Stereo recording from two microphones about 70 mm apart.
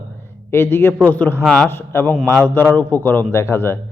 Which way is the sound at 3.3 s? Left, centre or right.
Left.